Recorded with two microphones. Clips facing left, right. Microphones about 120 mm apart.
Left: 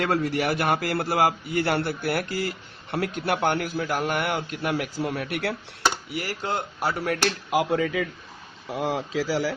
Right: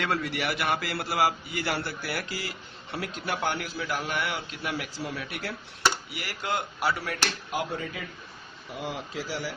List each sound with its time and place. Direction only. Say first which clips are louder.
0.0 s a man's voice: left 5 dB; 40° left (ahead or behind); by 5.5 s 70° left (ahead or behind)
6.1 s speech: left 3 dB; 35° left (ahead or behind)
6.8 s a man's voice: left 6 dB; 50° left (ahead or behind)
7.5 s speech: left 12 dB; 90° left